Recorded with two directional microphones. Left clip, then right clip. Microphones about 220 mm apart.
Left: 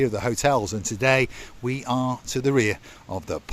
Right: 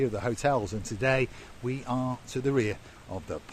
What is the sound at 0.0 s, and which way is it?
Speech, 35° left (ahead or behind).